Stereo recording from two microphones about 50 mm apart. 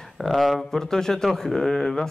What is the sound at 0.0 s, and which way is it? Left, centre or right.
Speech, centre.